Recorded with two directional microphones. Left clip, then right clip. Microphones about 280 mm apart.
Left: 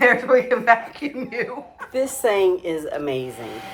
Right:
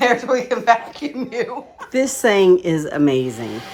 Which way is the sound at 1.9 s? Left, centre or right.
Right.